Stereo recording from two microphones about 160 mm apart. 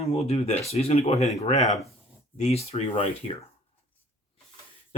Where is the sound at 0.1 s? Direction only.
40° left (ahead or behind).